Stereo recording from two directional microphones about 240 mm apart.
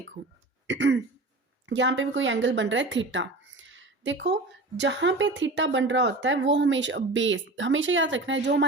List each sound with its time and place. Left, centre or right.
0.2 s speech: right
0.7 s throat clearing: right
1.6 s speech: right